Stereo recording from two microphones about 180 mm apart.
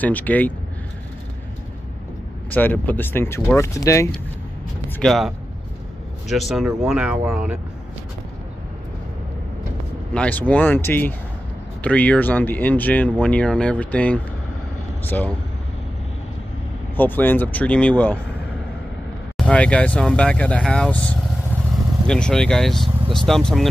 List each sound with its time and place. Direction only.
0.0 s speech: 10° left (ahead or behind)
2.5 s speech: 10° left (ahead or behind)
4.8 s speech: 5° left (ahead or behind)
10.1 s speech: 10° left (ahead or behind)
16.9 s speech: 10° left (ahead or behind)
19.3 s speech: 5° left (ahead or behind)